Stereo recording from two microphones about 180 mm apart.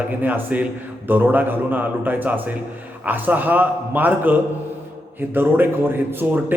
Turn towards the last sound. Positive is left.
turn(degrees=-10)  # may be behind; listen again after turning